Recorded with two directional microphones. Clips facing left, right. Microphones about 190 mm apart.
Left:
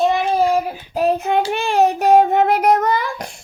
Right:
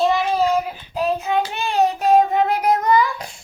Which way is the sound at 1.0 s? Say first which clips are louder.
Left 4 dB; 55° left (ahead or behind).